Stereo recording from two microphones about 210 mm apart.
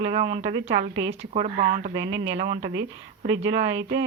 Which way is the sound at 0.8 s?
60° right (ahead or behind).